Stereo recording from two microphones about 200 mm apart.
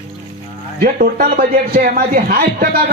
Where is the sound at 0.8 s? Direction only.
45° right (ahead or behind).